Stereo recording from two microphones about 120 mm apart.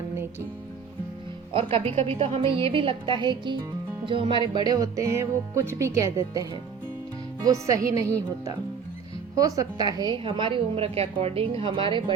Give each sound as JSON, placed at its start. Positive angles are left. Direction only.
{"t": 1.5, "sound": "a woman's voice", "side_deg": -55}
{"t": 4.0, "sound": "music", "side_deg": -45}
{"t": 9.3, "sound": "a woman's voice", "side_deg": -30}